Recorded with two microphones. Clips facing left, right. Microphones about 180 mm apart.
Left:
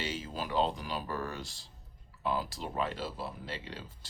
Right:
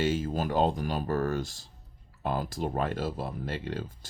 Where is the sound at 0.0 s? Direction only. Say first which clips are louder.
Right 9 dB; 50° right (ahead or behind).